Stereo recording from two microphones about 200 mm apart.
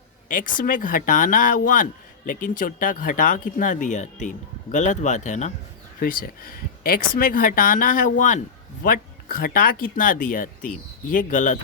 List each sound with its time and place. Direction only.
0.3 s speech: 45° left (ahead or behind)